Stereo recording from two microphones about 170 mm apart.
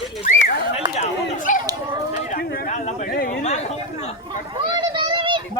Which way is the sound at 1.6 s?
20° right (ahead or behind).